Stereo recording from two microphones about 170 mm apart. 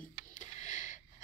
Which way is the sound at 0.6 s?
45° left (ahead or behind).